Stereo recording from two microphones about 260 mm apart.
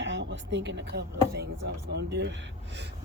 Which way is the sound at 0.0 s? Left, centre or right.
Right.